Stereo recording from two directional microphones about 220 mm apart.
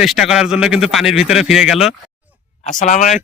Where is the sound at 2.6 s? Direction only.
35° left (ahead or behind).